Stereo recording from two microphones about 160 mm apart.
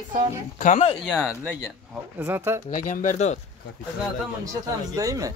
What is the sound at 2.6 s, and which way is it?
Speech, 60° left (ahead or behind).